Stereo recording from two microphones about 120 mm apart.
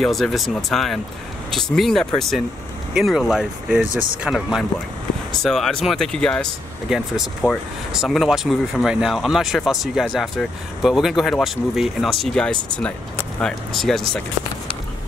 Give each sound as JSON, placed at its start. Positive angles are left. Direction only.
{"t": 0.0, "sound": "speech", "side_deg": 0}
{"t": 7.9, "sound": "speech", "side_deg": -5}